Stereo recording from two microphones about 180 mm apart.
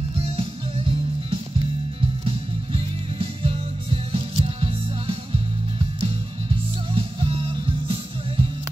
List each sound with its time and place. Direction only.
0.2 s music: 30° right (ahead or behind)
6.9 s music: 30° right (ahead or behind)